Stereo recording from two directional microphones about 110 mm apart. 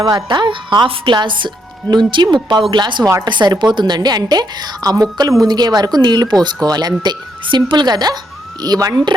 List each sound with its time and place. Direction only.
0.0 s a woman's voice: 35° right (ahead or behind)